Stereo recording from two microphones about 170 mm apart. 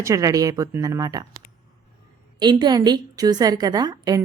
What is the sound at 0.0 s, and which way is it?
A woman's voice, 20° right (ahead or behind).